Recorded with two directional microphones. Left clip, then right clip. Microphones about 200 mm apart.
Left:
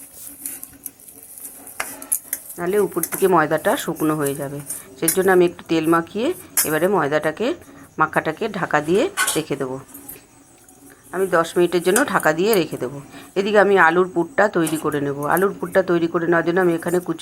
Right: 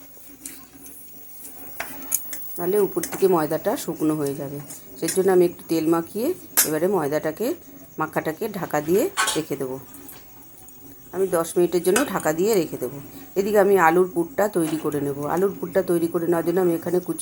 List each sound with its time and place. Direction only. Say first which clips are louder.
2.6 s speech: left 2 dB; 10° left (ahead or behind)
11.1 s speech: left 4 dB; 5° left (ahead or behind)